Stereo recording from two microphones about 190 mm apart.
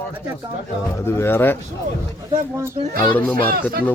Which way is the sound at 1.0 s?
10° left (ahead or behind).